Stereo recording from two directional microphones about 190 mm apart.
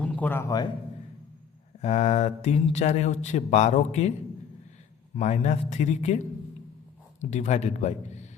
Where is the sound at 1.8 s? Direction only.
35° left (ahead or behind).